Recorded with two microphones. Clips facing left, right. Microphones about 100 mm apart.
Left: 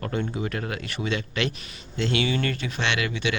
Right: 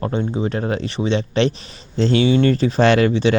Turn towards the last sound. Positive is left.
turn(degrees=-35)  # may be behind; listen again after turning